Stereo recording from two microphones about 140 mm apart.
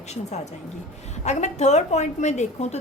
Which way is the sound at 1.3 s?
55° left (ahead or behind).